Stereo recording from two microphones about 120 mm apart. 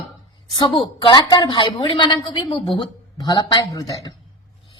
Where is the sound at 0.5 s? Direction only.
45° left (ahead or behind).